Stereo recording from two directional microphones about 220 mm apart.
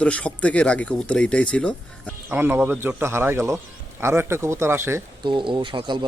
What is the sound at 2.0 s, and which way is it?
Speech, 10° right (ahead or behind).